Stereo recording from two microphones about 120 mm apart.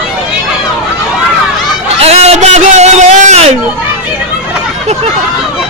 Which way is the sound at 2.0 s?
60° right (ahead or behind).